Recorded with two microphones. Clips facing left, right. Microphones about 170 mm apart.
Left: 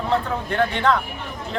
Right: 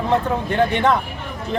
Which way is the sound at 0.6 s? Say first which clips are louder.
Right 2 dB; 20° right (ahead or behind).